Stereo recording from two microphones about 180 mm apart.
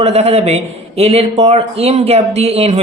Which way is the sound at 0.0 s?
35° right (ahead or behind).